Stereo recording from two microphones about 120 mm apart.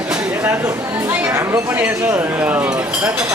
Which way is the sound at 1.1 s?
20° right (ahead or behind).